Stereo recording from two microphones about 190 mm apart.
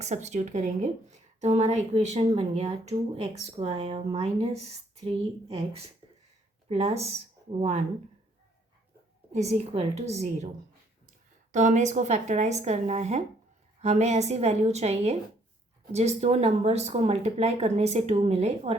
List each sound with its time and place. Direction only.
0.0 s speech: 35° right (ahead or behind)
9.3 s speech: 35° right (ahead or behind)
11.5 s speech: 40° right (ahead or behind)